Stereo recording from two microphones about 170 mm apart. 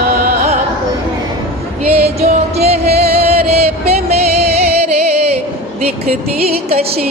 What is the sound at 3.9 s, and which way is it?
Music, 40° right (ahead or behind).